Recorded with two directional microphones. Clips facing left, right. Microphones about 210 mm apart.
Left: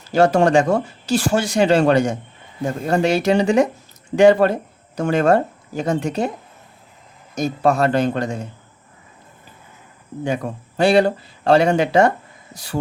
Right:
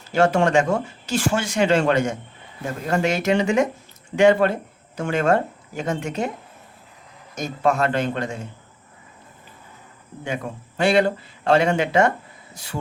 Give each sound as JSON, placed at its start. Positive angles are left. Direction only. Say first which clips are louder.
{"t": 0.1, "sound": "speech", "louder": "left 4 dB", "side_deg": 40}
{"t": 7.3, "sound": "speech", "louder": "left 4 dB", "side_deg": 35}
{"t": 10.2, "sound": "speech", "louder": "left 5 dB", "side_deg": 35}